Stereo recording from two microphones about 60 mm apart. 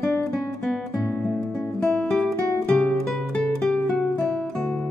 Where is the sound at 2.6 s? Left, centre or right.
Left.